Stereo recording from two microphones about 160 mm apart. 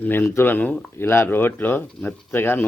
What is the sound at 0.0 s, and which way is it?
Speech, 10° left (ahead or behind).